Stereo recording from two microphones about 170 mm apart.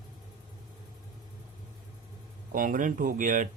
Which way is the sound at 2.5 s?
50° right (ahead or behind).